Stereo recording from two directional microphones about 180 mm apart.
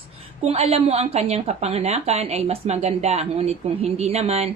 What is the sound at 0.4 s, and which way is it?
A woman's voice, 35° right (ahead or behind).